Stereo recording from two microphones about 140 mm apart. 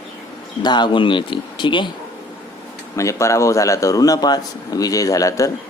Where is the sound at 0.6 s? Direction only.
30° left (ahead or behind).